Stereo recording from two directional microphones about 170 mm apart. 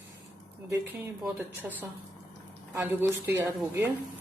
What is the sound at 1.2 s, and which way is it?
Speech, 10° right (ahead or behind).